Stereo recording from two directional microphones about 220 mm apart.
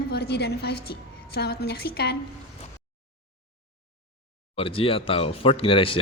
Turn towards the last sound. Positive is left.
turn(degrees=25)  # may be behind; listen again after turning